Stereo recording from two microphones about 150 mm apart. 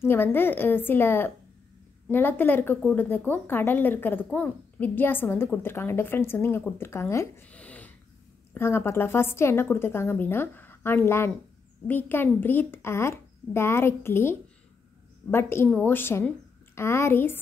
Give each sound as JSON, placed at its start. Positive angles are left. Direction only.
{"t": 0.0, "sound": "a woman's voice", "side_deg": 15}
{"t": 15.3, "sound": "a woman's voice", "side_deg": 15}